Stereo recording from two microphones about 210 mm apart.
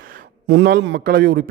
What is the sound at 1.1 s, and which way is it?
Speech, 45° right (ahead or behind).